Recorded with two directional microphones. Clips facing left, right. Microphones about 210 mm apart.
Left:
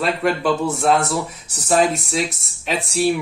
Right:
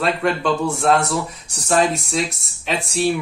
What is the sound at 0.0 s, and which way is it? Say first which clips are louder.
Speech: even; centre (ahead or behind).